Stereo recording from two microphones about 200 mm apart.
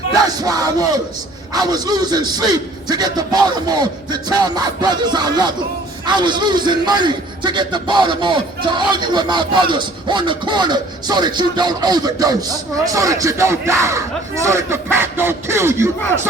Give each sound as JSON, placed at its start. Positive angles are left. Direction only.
{"t": 0.3, "sound": "a man's voice", "side_deg": -20}